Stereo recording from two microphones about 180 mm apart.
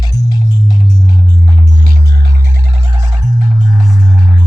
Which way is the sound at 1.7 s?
50° right (ahead or behind).